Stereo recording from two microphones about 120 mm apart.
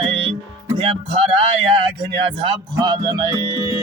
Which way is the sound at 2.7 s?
35° right (ahead or behind).